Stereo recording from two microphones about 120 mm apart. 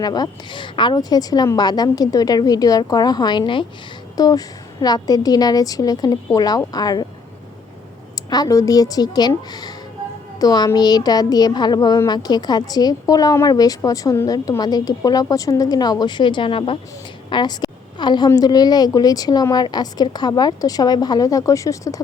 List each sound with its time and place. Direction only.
0.0 s a woman's voice: 35° left (ahead or behind)
4.2 s a woman's voice: 30° left (ahead or behind)
8.1 s a woman's voice: 30° left (ahead or behind)